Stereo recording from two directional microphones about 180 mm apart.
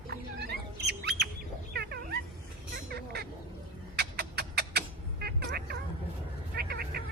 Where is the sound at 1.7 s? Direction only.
60° right (ahead or behind).